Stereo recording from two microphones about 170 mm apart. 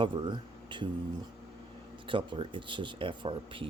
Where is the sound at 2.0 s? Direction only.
30° right (ahead or behind).